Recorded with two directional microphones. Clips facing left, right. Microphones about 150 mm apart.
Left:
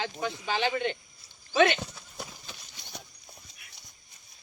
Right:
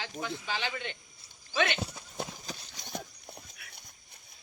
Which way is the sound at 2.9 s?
55° right (ahead or behind).